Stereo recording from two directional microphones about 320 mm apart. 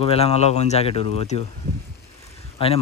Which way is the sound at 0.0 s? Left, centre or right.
Centre.